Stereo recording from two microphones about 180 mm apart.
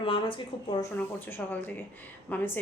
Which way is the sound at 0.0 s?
30° left (ahead or behind).